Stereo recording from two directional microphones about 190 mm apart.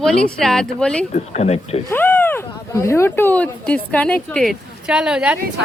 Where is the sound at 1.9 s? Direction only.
10° left (ahead or behind).